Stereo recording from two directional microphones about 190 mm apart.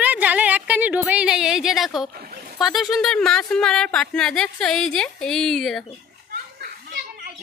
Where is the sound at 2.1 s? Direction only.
50° right (ahead or behind).